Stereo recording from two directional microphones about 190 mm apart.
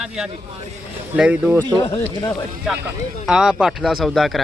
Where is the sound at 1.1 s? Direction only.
5° right (ahead or behind).